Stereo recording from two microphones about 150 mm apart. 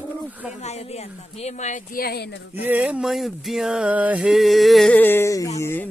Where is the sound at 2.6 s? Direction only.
10° right (ahead or behind).